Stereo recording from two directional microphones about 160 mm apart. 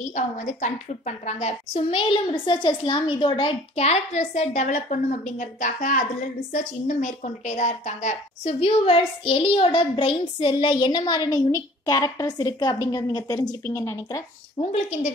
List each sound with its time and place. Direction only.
0.0 s a woman's voice: 50° left (ahead or behind); by 14.2 s 15° left (ahead or behind)
14.6 s a woman's voice: 45° left (ahead or behind)